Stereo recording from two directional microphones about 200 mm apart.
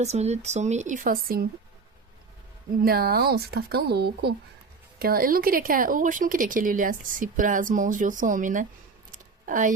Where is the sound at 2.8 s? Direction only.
50° right (ahead or behind).